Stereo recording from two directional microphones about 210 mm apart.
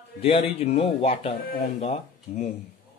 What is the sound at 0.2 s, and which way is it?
A man's voice, 30° left (ahead or behind).